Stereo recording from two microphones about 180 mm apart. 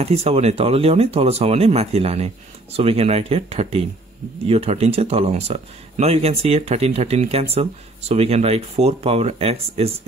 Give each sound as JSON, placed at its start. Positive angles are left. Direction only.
{"t": 0.0, "sound": "speech", "side_deg": -35}